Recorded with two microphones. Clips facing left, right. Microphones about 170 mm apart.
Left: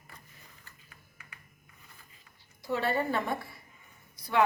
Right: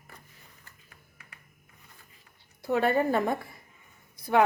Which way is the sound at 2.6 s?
55° right (ahead or behind).